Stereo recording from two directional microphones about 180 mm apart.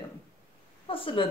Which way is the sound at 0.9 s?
30° left (ahead or behind).